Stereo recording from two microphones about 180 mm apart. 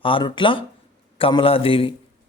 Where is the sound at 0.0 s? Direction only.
30° left (ahead or behind).